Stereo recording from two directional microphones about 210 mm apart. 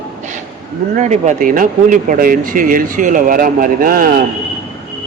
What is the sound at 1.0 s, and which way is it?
Speech, 35° right (ahead or behind).